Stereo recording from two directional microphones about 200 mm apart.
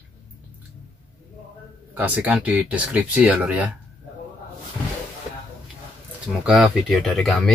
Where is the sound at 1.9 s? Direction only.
10° right (ahead or behind).